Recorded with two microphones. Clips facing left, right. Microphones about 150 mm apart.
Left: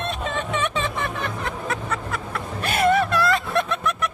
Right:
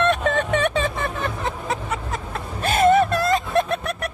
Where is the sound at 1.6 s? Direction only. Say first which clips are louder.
Right 1 dB; 20° right (ahead or behind).